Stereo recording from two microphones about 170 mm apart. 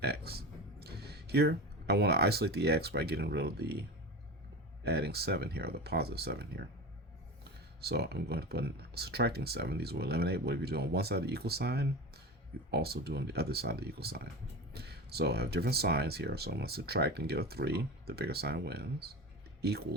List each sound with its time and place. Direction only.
0.0 s speech: 70° right (ahead or behind)
7.8 s speech: 70° right (ahead or behind)